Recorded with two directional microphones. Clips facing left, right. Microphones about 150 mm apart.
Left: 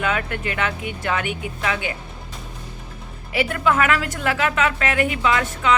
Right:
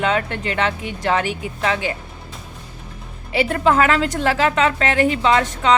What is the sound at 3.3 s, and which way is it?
Speech, 30° right (ahead or behind).